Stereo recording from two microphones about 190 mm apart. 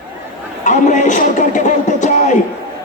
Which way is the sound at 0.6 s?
40° left (ahead or behind).